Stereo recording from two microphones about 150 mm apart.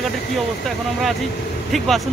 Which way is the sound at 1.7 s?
Centre (ahead or behind).